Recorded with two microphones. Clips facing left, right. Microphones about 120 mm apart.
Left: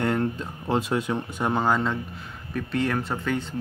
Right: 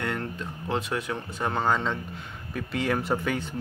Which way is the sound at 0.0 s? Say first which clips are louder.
Left 6 dB; 30° left (ahead or behind).